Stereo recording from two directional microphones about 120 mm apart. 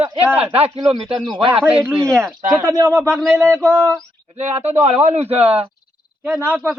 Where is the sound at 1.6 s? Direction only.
15° right (ahead or behind).